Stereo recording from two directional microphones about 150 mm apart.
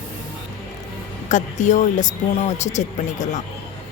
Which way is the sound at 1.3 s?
55° left (ahead or behind).